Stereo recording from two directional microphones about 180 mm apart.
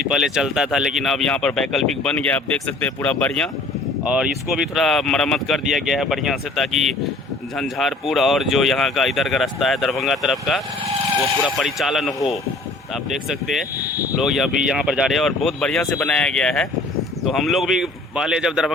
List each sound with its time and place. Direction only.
0.1 s speech: 5° right (ahead or behind)